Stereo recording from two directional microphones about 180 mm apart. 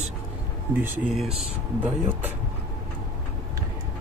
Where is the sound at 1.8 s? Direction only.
10° right (ahead or behind).